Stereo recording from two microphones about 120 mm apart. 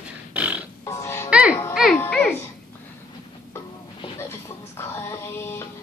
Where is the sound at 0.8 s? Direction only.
25° left (ahead or behind).